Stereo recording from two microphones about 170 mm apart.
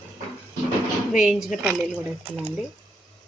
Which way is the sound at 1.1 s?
5° right (ahead or behind).